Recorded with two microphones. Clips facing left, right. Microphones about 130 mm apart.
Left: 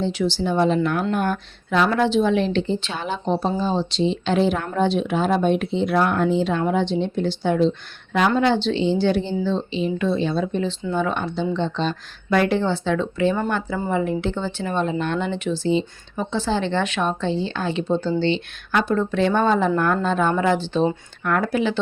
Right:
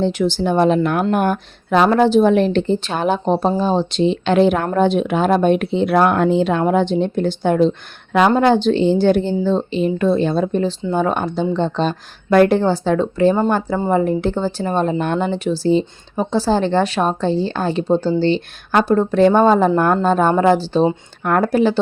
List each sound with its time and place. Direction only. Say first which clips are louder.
0.0 s speech: right 5 dB; 50° right (ahead or behind)
8.4 s speech: right 5 dB; 50° right (ahead or behind)